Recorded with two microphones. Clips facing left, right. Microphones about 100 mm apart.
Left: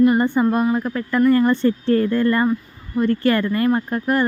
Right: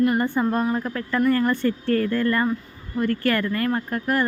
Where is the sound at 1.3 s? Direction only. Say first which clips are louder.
Left 5 dB; 25° left (ahead or behind).